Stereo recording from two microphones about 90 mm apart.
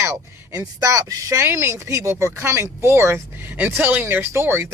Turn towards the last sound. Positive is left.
turn(degrees=-25)  # may be behind; listen again after turning